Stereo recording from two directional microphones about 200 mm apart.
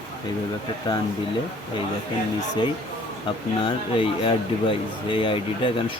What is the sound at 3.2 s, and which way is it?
Speech, 25° left (ahead or behind).